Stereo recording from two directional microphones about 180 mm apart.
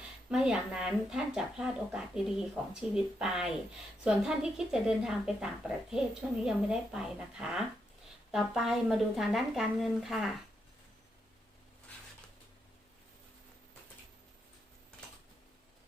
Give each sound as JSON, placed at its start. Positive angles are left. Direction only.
{"t": 0.3, "sound": "speech", "side_deg": -5}